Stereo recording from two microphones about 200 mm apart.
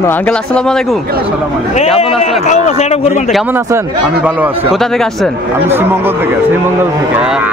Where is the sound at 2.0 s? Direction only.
30° left (ahead or behind).